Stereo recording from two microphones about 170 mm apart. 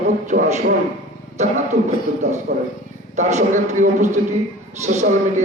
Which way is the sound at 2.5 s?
60° right (ahead or behind).